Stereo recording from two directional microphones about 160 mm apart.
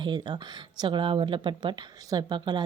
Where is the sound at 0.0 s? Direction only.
30° right (ahead or behind).